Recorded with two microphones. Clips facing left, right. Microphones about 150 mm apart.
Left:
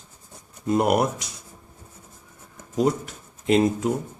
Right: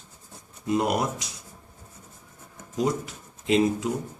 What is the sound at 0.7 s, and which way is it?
Speech, 55° left (ahead or behind).